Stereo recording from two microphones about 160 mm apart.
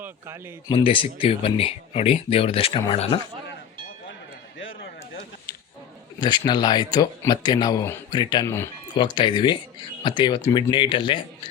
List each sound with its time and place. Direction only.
0.0 s speech: 15° right (ahead or behind)
0.7 s speech: 35° left (ahead or behind)
6.1 s speech: 25° left (ahead or behind)
8.4 s speech: 15° left (ahead or behind)
9.1 s speech: 30° left (ahead or behind)